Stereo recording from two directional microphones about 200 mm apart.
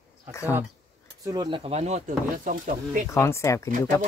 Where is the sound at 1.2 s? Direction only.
20° right (ahead or behind); by 3.1 s 45° right (ahead or behind).